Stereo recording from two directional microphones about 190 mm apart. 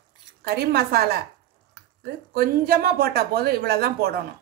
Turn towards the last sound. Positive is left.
turn(degrees=-55)  # may be behind; listen again after turning